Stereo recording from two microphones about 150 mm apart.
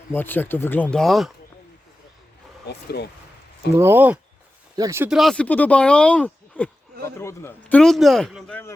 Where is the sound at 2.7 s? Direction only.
90° left.